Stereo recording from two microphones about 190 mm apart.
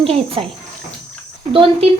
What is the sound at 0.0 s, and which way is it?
Speech, 30° right (ahead or behind).